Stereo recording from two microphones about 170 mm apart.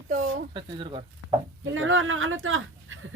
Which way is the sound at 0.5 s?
30° right (ahead or behind).